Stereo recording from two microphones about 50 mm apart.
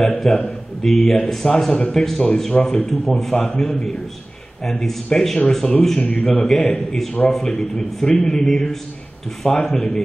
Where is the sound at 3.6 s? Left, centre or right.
Centre.